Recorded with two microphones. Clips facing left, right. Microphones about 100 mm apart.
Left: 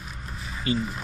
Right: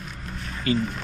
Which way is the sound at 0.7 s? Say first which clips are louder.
Right 3 dB; centre (ahead or behind).